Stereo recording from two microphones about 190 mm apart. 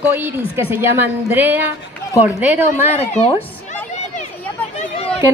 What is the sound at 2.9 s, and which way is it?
Speech, 35° left (ahead or behind).